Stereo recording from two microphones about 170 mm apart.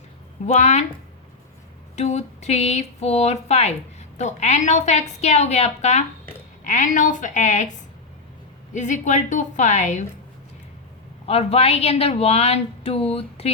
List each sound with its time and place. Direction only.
0.4 s a woman's voice: 40° left (ahead or behind)
2.0 s a woman's voice: 40° left (ahead or behind)
8.7 s a woman's voice: 45° left (ahead or behind)
11.3 s a woman's voice: 35° left (ahead or behind)